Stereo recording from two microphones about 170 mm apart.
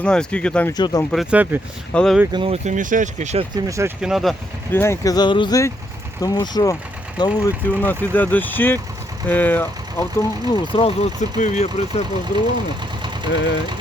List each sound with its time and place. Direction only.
0.0 s speech: 5° left (ahead or behind)
0.7 s speech: 25° left (ahead or behind)
1.1 s speech: 5° right (ahead or behind)
1.9 s speech: 5° left (ahead or behind)
2.3 s speech: 30° right (ahead or behind)
2.6 s speech: 50° right (ahead or behind)
3.5 s speech: 15° right (ahead or behind)
4.0 s speech: centre (ahead or behind)
4.7 s speech: 15° left (ahead or behind)
7.7 s speech: 10° left (ahead or behind)
10.5 s speech: 30° left (ahead or behind)
13.3 s speech: 90° left